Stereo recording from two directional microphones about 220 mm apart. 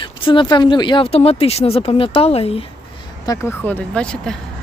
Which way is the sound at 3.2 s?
10° left (ahead or behind).